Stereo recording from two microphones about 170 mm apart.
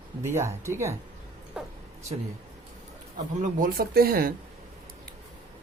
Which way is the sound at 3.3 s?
50° right (ahead or behind).